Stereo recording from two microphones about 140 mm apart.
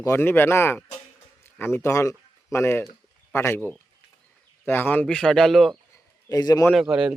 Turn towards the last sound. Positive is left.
turn(degrees=-10)  # may be behind; listen again after turning